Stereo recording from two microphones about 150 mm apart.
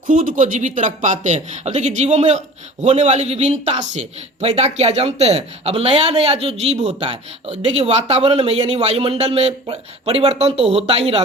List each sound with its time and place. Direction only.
0.1 s a man's voice: 60° right (ahead or behind); by 11.2 s 40° right (ahead or behind)